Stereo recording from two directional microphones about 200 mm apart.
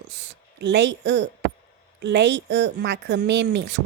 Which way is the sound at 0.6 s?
60° right (ahead or behind).